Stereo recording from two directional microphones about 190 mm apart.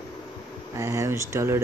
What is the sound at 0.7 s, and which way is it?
Speech, 15° right (ahead or behind).